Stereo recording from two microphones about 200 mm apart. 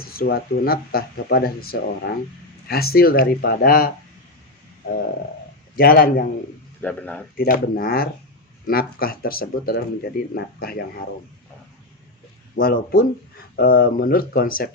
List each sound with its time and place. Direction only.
0.1 s speech: 50° left (ahead or behind)
5.7 s speech: 45° left (ahead or behind)
6.8 s speech: 10° left (ahead or behind)
7.3 s speech: 45° left (ahead or behind)
12.5 s speech: 45° left (ahead or behind)